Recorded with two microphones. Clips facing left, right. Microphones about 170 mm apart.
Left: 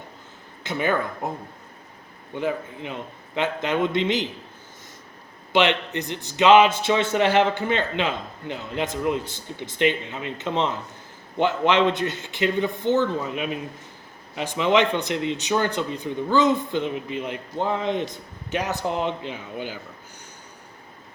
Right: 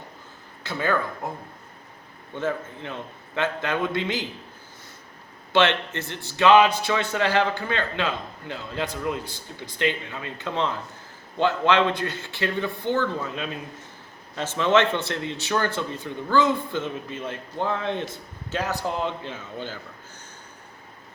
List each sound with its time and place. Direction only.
0.6 s a man's voice: 20° left (ahead or behind)
2.3 s a man's voice: 15° left (ahead or behind)
5.5 s a man's voice: 15° left (ahead or behind)